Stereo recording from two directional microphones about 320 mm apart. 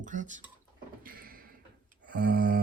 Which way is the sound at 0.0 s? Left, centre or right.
Right.